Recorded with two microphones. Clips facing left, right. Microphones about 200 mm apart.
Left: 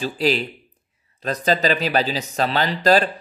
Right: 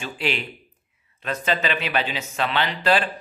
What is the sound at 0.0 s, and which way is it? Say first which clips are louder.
Speech: left 7 dB; 35° left (ahead or behind).